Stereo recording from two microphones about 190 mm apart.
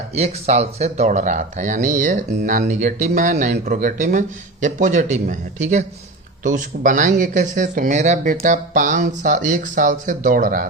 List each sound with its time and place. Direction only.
0.1 s speech: 35° right (ahead or behind)